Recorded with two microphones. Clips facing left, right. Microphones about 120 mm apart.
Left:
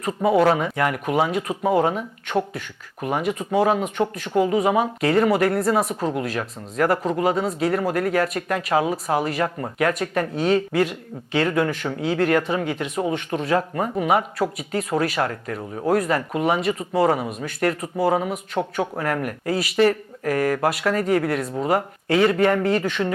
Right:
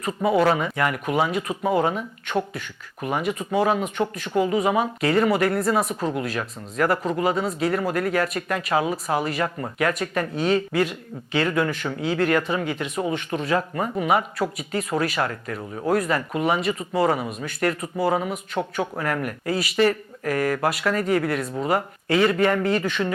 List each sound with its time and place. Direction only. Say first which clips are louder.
0.0 s speech: left 2 dB; 50° left (ahead or behind)